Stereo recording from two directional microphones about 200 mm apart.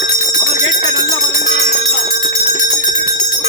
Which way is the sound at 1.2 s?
40° left (ahead or behind).